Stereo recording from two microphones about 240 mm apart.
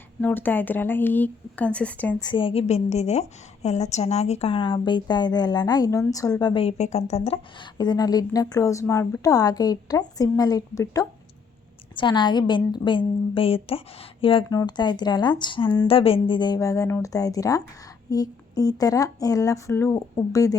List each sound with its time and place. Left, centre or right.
0.2 s a woman's voice: centre
2.2 s a woman's voice: left